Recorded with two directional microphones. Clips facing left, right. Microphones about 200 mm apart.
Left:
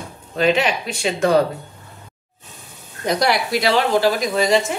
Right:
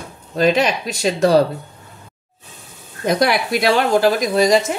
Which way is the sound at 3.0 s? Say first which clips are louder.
Right 2 dB; 55° right (ahead or behind).